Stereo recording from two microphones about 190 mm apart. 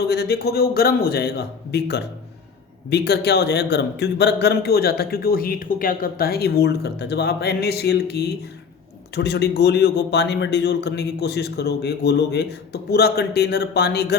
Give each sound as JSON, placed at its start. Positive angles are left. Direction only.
{"t": 0.1, "sound": "a man's voice", "side_deg": 60}